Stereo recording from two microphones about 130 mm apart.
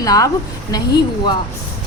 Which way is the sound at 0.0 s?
30° left (ahead or behind).